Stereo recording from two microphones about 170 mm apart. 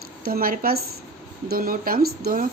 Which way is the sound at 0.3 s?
60° right (ahead or behind).